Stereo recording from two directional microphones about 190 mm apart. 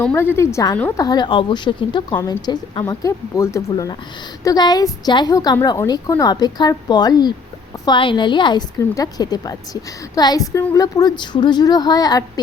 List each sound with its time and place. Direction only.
0.0 s a woman's voice: 10° left (ahead or behind)